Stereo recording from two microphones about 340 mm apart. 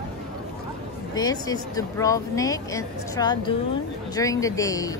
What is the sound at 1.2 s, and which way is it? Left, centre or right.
Speech, centre.